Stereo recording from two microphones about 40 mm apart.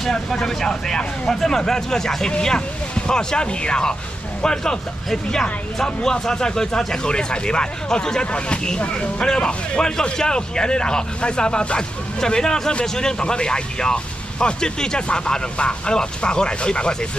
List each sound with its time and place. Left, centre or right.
0.1 s speech: centre
2.3 s speech: left